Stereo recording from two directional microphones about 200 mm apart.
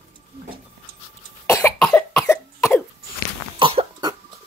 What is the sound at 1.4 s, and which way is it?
Cough, 15° left (ahead or behind).